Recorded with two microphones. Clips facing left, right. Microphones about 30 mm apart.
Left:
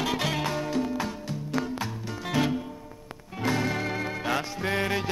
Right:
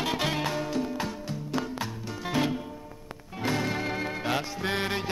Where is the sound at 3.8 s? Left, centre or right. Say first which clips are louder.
Left 1 dB; right.